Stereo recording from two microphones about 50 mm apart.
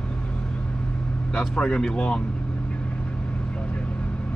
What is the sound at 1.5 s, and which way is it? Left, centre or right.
Speech, centre.